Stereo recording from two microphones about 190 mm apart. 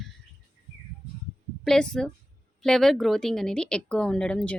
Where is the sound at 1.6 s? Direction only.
5° left (ahead or behind).